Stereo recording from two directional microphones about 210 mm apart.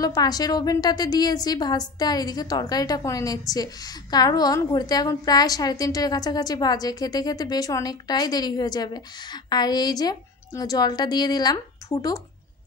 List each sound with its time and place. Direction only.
0.0 s a woman's voice: 20° left (ahead or behind)